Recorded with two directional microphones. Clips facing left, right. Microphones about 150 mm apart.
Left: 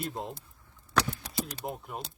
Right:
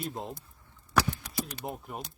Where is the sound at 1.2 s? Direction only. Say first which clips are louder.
Even; 35° left (ahead or behind).